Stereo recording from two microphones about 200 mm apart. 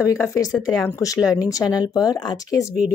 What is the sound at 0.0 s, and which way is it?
Speech, 15° left (ahead or behind).